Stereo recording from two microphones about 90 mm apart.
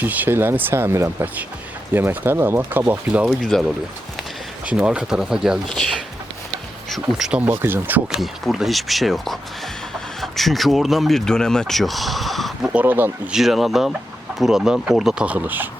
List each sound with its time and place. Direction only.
0.0 s speech: 20° right (ahead or behind)
3.2 s speech: 5° left (ahead or behind)
4.6 s speech: 10° right (ahead or behind)
5.6 s speech: 5° left (ahead or behind); by 7.5 s 10° right (ahead or behind)
7.5 s speech: 25° right (ahead or behind)
8.1 s speech: 5° right (ahead or behind)
12.7 s speech: 20° right (ahead or behind)
13.3 s speech: 5° right (ahead or behind)
15.3 s speech: 20° right (ahead or behind)